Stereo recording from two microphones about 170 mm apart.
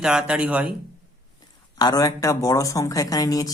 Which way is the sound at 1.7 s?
20° left (ahead or behind).